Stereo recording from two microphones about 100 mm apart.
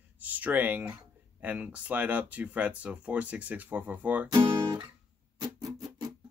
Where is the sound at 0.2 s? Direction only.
15° right (ahead or behind).